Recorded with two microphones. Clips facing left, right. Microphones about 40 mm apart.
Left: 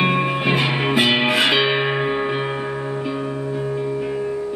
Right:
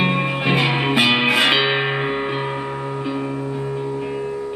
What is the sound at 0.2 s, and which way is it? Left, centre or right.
Music, centre.